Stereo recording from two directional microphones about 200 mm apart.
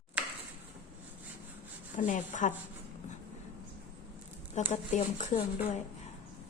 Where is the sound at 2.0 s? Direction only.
40° left (ahead or behind).